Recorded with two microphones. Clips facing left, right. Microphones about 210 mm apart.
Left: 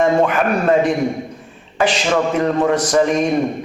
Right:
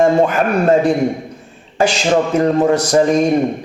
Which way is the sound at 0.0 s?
40° right (ahead or behind).